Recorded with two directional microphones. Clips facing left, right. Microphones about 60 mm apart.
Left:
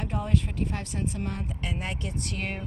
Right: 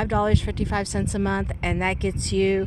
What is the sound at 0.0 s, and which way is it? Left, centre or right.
Speech, right.